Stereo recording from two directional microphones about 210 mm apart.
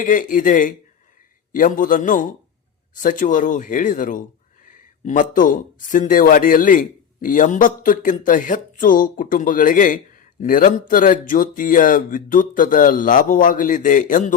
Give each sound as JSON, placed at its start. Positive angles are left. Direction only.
{"t": 0.0, "sound": "speech", "side_deg": 40}